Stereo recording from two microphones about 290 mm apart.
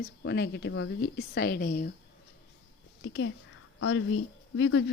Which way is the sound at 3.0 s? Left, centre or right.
Left.